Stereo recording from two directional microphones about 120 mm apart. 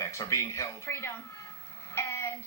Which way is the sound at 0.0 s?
25° left (ahead or behind).